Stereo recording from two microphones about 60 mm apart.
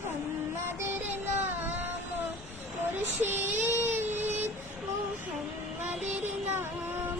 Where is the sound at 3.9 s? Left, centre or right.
Right.